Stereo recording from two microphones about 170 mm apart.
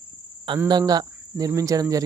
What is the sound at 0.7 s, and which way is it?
Speech, 25° right (ahead or behind).